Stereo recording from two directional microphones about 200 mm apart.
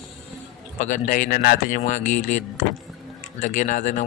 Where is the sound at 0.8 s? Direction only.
40° left (ahead or behind).